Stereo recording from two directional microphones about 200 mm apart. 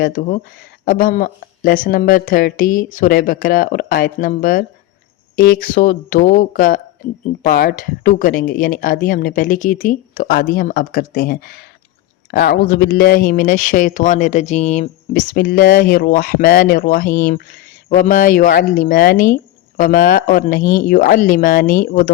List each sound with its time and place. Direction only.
0.0 s speech: 40° left (ahead or behind)